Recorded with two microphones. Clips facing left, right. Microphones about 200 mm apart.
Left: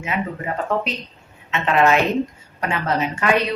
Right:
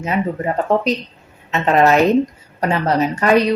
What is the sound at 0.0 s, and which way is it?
A woman's voice, 35° right (ahead or behind).